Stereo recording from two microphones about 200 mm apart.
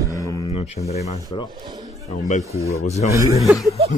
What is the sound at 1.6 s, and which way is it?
Speech, 20° right (ahead or behind).